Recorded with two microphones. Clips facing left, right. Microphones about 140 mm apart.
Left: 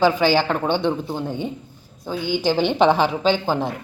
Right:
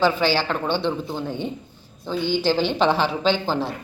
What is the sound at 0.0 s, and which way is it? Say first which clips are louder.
A woman's voice: left 3 dB; 15° left (ahead or behind).